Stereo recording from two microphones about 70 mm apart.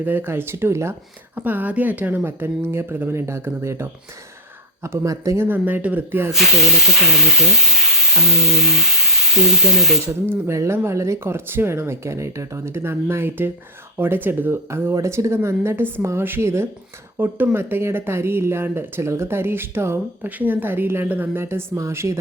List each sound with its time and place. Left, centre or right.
0.0 s speech: right
1.4 s speech: right
5.0 s a woman's voice: right
5.5 s speech: right
6.3 s speech: centre
10.2 s speech: right
17.2 s a woman's voice: right